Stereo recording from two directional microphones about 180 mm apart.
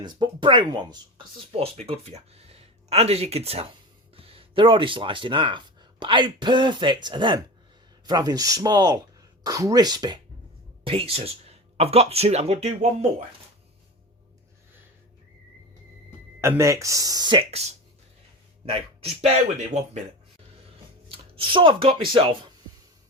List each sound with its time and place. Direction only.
0.0 s speech: 25° right (ahead or behind)
16.4 s a man's voice: 15° right (ahead or behind); by 19.3 s 35° right (ahead or behind)
21.1 s speech: 30° right (ahead or behind)